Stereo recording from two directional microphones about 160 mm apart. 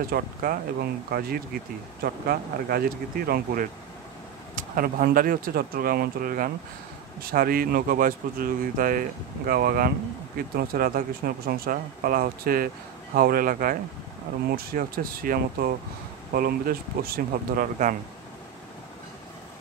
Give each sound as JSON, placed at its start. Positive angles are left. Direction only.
{"t": 0.1, "sound": "speech", "side_deg": -65}
{"t": 1.1, "sound": "speech", "side_deg": -75}
{"t": 4.6, "sound": "speech", "side_deg": -60}